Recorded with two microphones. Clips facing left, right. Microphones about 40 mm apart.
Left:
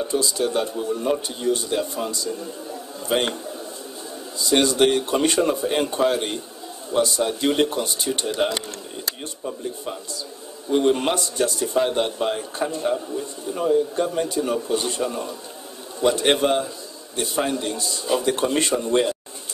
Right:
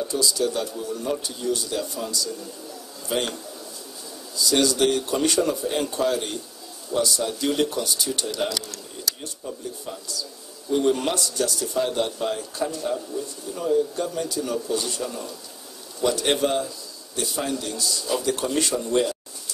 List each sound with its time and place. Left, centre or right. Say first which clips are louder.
0.0 s a man's voice: left 1 dB; left
4.4 s a man's voice: left 2 dB; left